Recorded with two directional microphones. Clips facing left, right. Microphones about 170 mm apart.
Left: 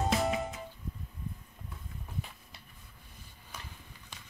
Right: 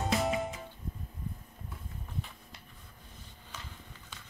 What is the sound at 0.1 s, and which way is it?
Music, centre (ahead or behind).